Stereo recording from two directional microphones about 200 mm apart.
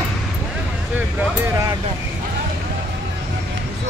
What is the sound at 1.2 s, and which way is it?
Vehicle, 15° right (ahead or behind).